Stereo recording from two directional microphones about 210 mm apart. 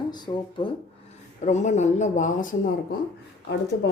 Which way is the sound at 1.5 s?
35° left (ahead or behind).